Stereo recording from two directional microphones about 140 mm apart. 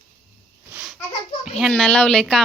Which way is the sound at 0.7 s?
5° right (ahead or behind).